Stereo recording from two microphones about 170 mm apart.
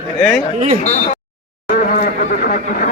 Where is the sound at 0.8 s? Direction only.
40° left (ahead or behind).